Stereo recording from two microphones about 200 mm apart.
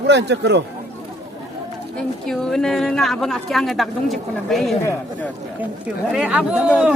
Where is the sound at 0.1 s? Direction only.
60° right (ahead or behind).